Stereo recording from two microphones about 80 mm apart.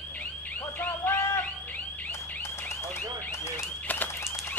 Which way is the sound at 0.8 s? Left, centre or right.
Left.